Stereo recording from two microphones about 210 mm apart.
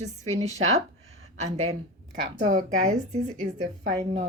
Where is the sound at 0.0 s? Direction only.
30° right (ahead or behind).